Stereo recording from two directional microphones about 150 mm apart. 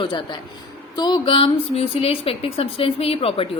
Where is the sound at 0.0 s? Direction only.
30° left (ahead or behind).